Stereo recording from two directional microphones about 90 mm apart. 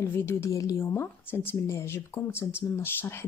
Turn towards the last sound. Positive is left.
turn(degrees=25)  # may be behind; listen again after turning